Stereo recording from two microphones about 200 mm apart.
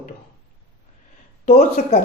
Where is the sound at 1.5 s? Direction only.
45° left (ahead or behind).